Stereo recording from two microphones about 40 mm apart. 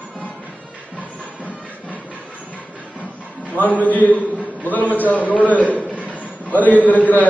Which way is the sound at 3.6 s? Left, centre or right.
Left.